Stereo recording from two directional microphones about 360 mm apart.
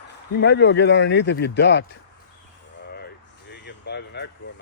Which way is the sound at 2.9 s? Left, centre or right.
Left.